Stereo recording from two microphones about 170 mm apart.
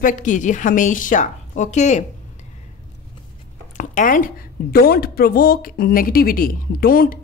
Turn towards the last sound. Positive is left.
turn(degrees=60)  # may be behind; listen again after turning